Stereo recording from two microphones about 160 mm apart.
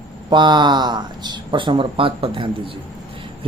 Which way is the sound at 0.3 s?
30° right (ahead or behind).